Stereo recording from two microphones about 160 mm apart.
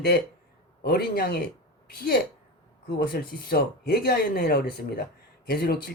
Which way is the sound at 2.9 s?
75° left (ahead or behind).